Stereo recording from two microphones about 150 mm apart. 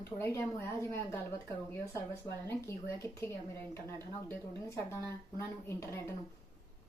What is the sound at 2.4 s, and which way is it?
Speech, 20° left (ahead or behind).